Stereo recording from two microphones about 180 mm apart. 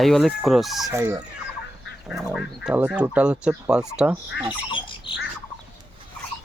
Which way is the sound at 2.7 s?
5° right (ahead or behind).